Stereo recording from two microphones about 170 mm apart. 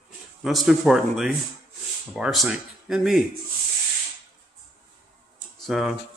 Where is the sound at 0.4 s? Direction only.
Centre (ahead or behind).